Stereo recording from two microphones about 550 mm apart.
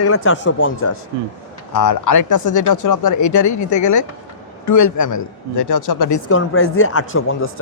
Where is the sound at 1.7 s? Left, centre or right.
Left.